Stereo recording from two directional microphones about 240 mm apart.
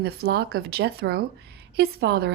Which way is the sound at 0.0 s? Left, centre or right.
Right.